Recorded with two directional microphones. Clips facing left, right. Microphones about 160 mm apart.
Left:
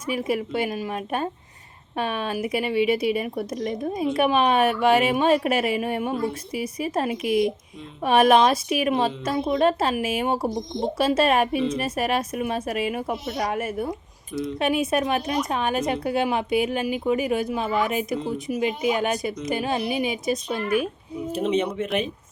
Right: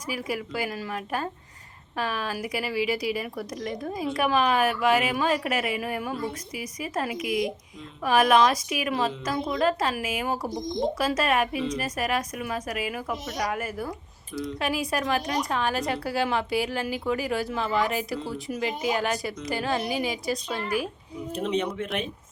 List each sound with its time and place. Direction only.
0.0 s speech: 25° left (ahead or behind)
21.3 s speech: 5° left (ahead or behind)